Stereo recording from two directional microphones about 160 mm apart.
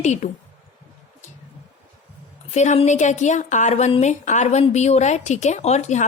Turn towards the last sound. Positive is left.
turn(degrees=45)  # may be behind; listen again after turning